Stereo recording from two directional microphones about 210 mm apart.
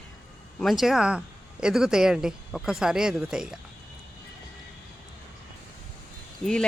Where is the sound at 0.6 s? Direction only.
Centre (ahead or behind).